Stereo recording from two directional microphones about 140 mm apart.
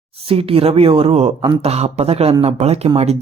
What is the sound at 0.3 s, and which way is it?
Speech, 45° right (ahead or behind).